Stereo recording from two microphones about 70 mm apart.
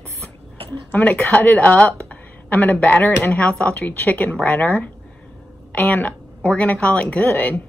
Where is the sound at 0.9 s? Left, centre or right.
Left.